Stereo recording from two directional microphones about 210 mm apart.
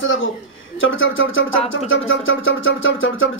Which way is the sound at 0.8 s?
70° left (ahead or behind).